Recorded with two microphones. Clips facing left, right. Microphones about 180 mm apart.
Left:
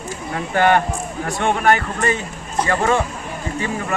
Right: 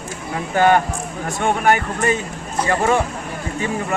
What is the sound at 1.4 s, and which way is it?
Speech, 10° right (ahead or behind).